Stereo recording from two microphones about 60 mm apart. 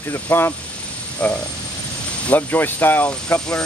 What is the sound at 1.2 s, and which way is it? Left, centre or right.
Speech, left.